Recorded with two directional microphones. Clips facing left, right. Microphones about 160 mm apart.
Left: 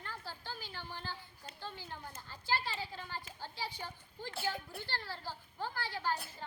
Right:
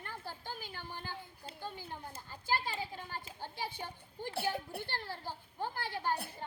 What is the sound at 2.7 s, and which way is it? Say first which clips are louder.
Speech: right 2 dB; 15° right (ahead or behind).